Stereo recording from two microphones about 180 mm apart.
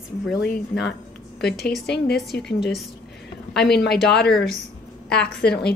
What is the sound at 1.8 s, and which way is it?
Speech, 70° left (ahead or behind).